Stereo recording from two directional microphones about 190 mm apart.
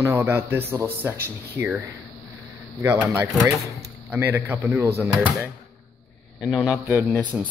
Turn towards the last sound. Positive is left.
turn(degrees=-10)  # may be behind; listen again after turning